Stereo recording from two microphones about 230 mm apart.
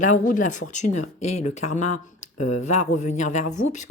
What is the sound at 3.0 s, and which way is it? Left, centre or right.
Speech, left.